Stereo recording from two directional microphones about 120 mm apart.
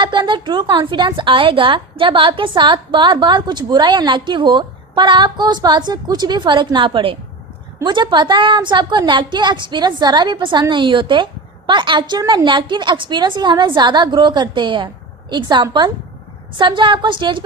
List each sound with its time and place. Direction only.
0.0 s a woman's voice: 40° right (ahead or behind)